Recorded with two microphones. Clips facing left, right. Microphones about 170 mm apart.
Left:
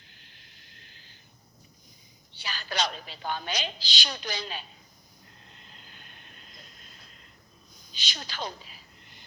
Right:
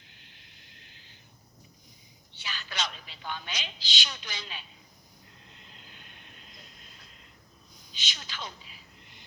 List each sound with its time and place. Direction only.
2.3 s a woman's voice: 35° left (ahead or behind)
5.5 s vehicle: 40° left (ahead or behind)
7.9 s a sound: 35° left (ahead or behind)